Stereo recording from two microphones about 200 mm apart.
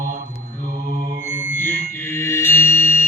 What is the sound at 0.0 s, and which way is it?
Mantra, 40° right (ahead or behind).